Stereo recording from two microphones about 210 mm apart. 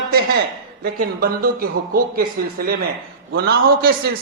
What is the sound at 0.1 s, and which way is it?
A man's voice, 45° right (ahead or behind).